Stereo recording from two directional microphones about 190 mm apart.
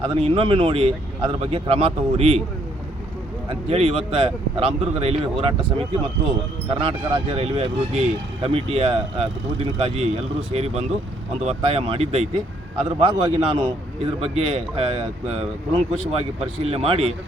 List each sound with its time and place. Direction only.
0.0 s speech: 30° right (ahead or behind)
3.5 s a man's voice: 30° right (ahead or behind)
6.7 s a man's voice: 30° right (ahead or behind)